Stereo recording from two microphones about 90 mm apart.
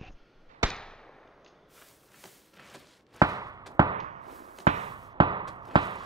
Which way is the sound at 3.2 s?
40° right (ahead or behind).